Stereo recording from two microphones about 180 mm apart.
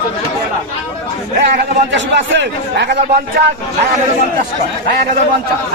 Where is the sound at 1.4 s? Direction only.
70° right (ahead or behind).